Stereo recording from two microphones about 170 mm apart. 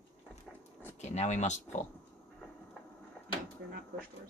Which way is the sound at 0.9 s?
40° left (ahead or behind).